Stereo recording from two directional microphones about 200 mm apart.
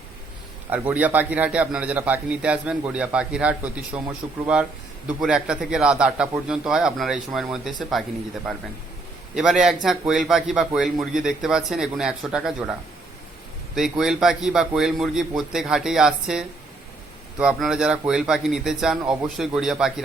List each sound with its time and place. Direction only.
0.7 s a man's voice: 10° right (ahead or behind)
9.3 s a man's voice: 5° right (ahead or behind)
13.7 s a man's voice: centre (ahead or behind)